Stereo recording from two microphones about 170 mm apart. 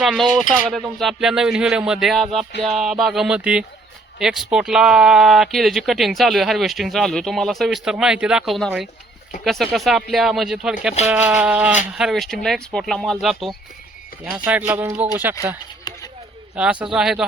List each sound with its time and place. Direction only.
0.0 s speech: centre (ahead or behind)
11.0 s toothbrush: 10° right (ahead or behind)
11.9 s speech: centre (ahead or behind)
14.4 s toothbrush: 10° right (ahead or behind)
15.9 s a sound: 25° left (ahead or behind)
16.8 s speech: 5° right (ahead or behind)